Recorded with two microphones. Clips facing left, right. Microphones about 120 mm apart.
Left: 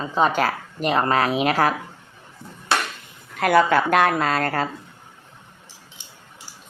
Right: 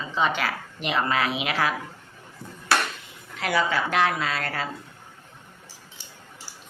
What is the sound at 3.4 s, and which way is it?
Speech, 50° left (ahead or behind).